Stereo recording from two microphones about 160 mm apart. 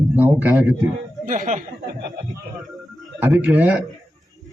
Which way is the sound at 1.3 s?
55° right (ahead or behind).